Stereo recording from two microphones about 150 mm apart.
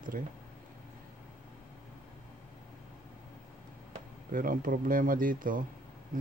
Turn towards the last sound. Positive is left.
turn(degrees=-65)  # may be behind; listen again after turning